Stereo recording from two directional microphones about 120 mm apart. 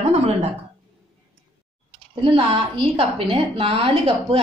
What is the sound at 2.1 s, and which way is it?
A woman's voice, 45° right (ahead or behind).